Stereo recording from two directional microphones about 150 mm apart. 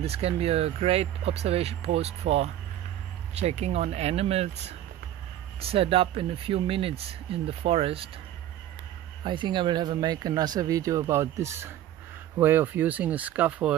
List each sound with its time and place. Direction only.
0.0 s speech: 40° right (ahead or behind)
9.2 s speech: 30° right (ahead or behind); by 13.7 s 10° right (ahead or behind)